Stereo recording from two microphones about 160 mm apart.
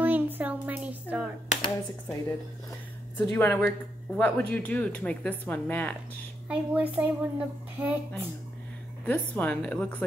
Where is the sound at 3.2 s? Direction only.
15° left (ahead or behind).